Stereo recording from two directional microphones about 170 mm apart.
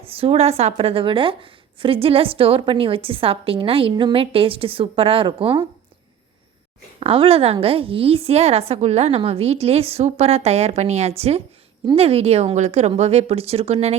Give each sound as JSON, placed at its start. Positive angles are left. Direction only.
{"t": 0.0, "sound": "speech", "side_deg": -35}
{"t": 7.0, "sound": "speech", "side_deg": -35}